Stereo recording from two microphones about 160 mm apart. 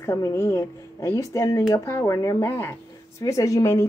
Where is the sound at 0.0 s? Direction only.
15° left (ahead or behind).